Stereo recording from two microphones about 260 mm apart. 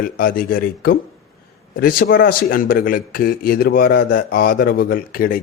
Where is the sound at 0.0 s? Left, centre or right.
Left.